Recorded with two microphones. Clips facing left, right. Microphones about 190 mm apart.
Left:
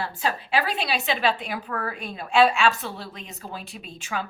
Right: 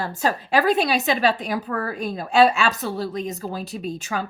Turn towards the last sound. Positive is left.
turn(degrees=-40)  # may be behind; listen again after turning